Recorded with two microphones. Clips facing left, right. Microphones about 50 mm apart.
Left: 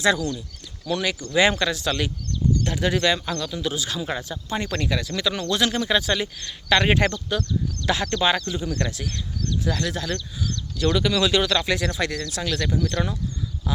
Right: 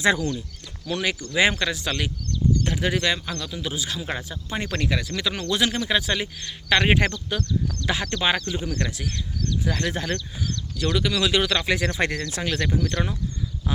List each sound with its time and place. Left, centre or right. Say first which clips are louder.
0.0 s speech: even; centre
8.7 s speech: left 1 dB; centre
9.6 s speech: even; right
10.5 s speech: left 3 dB; centre
11.9 s speech: right 1 dB; right